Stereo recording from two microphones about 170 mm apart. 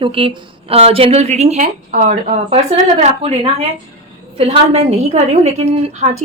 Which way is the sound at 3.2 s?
35° right (ahead or behind).